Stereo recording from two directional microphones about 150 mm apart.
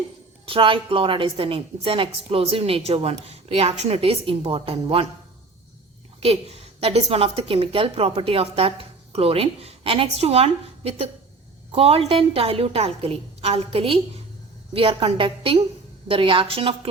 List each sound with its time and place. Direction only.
0.4 s a woman's voice: 35° right (ahead or behind)
6.1 s a woman's voice: 40° right (ahead or behind)